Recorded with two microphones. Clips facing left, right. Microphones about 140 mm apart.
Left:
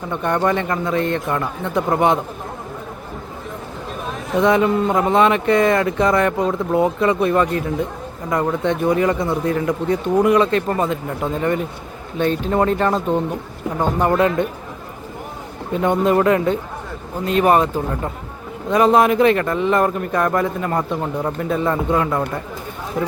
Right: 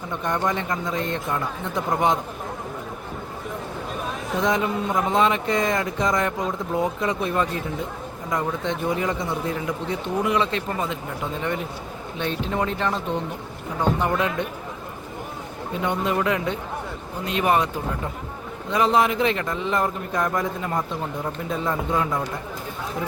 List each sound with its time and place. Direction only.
0.1 s a man's voice: 60° left (ahead or behind)
4.4 s a man's voice: 65° left (ahead or behind); by 13.0 s 45° left (ahead or behind)
14.0 s speech: 50° left (ahead or behind)
15.8 s speech: 45° left (ahead or behind)
18.7 s a man's voice: 50° left (ahead or behind)